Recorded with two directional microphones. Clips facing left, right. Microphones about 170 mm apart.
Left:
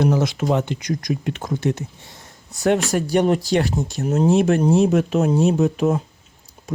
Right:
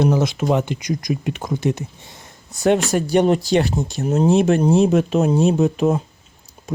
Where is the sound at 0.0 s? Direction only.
20° right (ahead or behind).